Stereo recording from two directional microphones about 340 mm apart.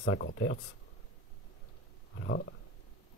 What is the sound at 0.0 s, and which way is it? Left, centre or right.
Speech, left.